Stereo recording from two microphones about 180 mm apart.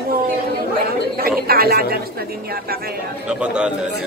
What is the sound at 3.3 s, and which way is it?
Speech, 5° right (ahead or behind).